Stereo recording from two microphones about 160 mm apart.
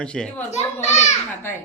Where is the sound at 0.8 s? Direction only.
45° left (ahead or behind).